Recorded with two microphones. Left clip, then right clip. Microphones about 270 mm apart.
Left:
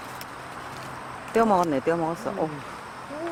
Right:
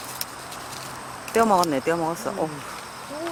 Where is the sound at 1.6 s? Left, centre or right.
Centre.